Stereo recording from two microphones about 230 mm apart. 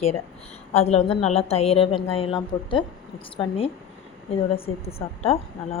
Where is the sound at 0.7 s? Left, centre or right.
Left.